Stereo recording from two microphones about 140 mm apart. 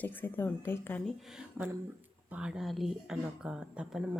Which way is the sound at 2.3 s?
5° right (ahead or behind).